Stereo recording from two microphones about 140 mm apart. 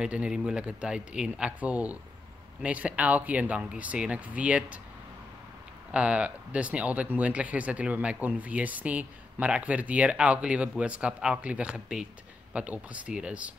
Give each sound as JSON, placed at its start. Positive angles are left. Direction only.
{"t": 0.0, "sound": "speech", "side_deg": -5}
{"t": 5.9, "sound": "speech", "side_deg": -10}